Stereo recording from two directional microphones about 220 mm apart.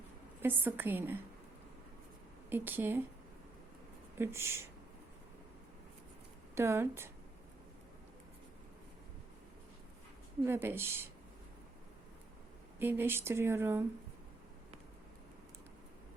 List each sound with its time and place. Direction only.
0.4 s speech: 10° right (ahead or behind)
2.5 s speech: 10° right (ahead or behind)
4.2 s speech: 10° right (ahead or behind)
6.6 s speech: 10° right (ahead or behind)
10.4 s speech: 10° right (ahead or behind)
12.8 s speech: 10° right (ahead or behind)